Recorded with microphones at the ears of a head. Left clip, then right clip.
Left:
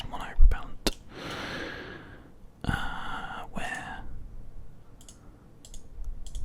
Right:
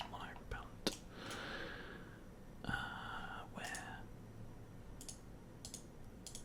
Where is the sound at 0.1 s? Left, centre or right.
Left.